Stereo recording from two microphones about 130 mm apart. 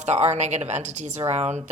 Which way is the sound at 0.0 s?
60° right (ahead or behind).